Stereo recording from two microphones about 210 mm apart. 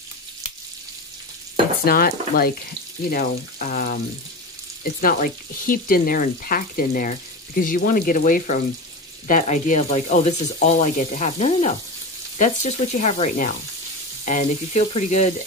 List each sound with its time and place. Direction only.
1.9 s speech: 45° left (ahead or behind)
5.0 s speech: 40° left (ahead or behind)